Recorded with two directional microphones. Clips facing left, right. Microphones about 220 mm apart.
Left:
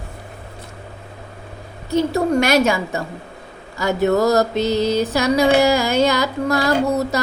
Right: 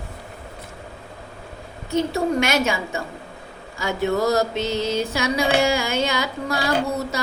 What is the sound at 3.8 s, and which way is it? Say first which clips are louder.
Mantra: left 5 dB; 40° left (ahead or behind).